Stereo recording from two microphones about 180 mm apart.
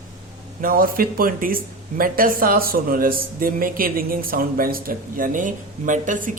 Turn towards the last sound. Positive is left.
turn(degrees=-45)  # may be behind; listen again after turning